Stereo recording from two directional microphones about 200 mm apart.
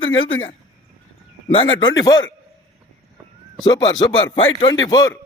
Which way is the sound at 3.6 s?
20° left (ahead or behind).